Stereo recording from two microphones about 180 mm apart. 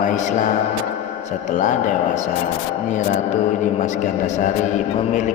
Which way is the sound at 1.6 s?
45° left (ahead or behind).